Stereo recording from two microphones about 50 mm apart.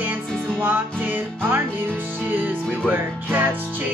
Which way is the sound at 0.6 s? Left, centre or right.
Right.